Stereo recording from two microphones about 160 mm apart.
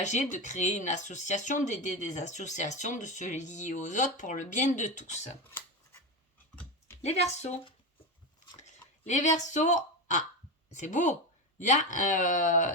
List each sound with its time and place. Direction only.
0.0 s speech: 50° left (ahead or behind)
7.0 s speech: 40° left (ahead or behind)
8.5 s a sound: 45° left (ahead or behind)
10.7 s speech: 50° left (ahead or behind)